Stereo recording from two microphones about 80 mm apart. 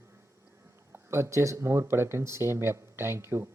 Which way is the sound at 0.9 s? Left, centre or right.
Right.